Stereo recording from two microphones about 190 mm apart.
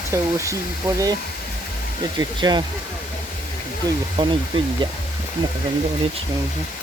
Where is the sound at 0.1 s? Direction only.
15° right (ahead or behind).